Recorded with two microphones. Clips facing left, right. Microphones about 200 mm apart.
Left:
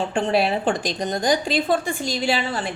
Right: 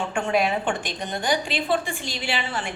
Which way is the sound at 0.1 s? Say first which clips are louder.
Left 1 dB; 35° left (ahead or behind).